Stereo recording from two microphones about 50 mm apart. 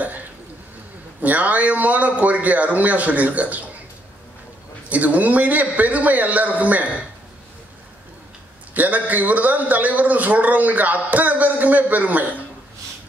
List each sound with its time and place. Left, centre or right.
1.2 s a man's voice: right
4.8 s a man's voice: right
8.7 s a man's voice: right